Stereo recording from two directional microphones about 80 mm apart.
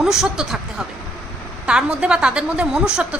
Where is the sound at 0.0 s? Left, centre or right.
Centre.